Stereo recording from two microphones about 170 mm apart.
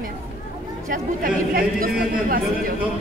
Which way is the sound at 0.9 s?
55° right (ahead or behind).